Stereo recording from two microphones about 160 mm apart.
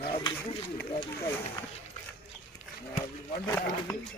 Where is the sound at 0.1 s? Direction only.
30° left (ahead or behind).